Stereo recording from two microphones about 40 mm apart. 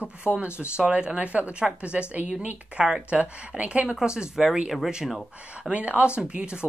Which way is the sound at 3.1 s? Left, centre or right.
Right.